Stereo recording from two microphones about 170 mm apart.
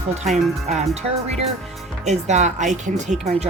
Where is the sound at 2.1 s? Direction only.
45° right (ahead or behind).